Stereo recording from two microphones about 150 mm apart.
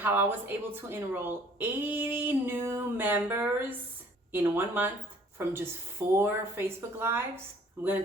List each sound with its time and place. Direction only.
0.0 s a woman's voice: 15° right (ahead or behind)